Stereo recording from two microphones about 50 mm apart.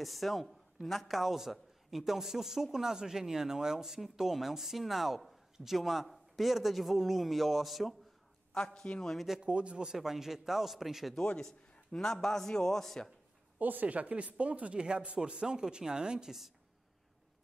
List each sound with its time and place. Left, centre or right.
0.0 s a man's voice: centre
8.5 s a man's voice: centre
9.1 s a man's voice: centre
9.4 s speech: right
9.9 s a man's voice: centre
11.7 s a man's voice: centre
13.6 s speech: right; by 16.5 s centre